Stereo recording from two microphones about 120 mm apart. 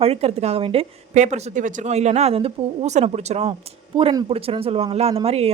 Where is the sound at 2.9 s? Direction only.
70° right (ahead or behind).